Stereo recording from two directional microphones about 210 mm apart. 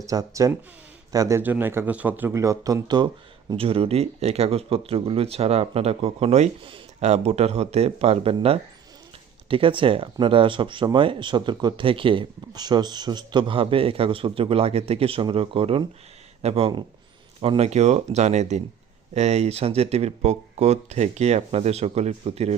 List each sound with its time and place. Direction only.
0.0 s speech: 15° right (ahead or behind)